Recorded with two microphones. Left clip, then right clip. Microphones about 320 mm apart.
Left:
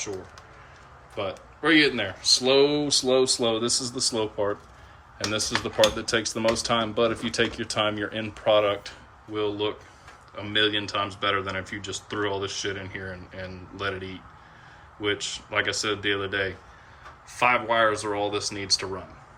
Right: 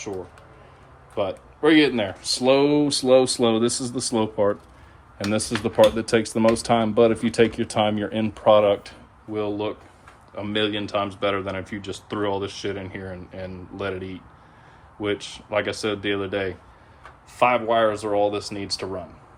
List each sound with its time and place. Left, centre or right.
1.1 s speech: centre